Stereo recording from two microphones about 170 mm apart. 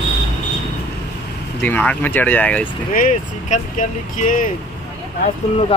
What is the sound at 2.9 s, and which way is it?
Speech, 50° left (ahead or behind).